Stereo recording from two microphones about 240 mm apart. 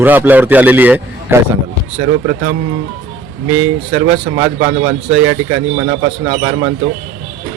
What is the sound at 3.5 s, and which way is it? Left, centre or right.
A man's voice, right.